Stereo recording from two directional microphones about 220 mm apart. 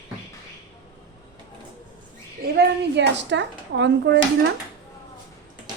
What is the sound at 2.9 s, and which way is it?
Speech, 55° right (ahead or behind).